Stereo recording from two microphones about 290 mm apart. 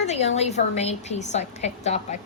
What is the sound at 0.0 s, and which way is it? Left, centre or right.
A woman's voice, left.